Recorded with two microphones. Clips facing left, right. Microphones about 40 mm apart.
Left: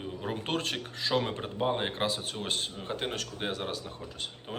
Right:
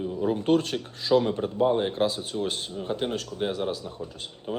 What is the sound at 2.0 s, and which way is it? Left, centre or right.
Speech, left.